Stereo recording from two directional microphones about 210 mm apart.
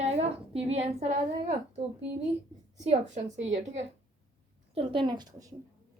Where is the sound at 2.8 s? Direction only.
35° right (ahead or behind).